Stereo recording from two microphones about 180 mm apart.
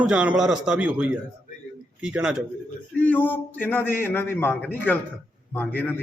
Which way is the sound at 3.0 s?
10° left (ahead or behind).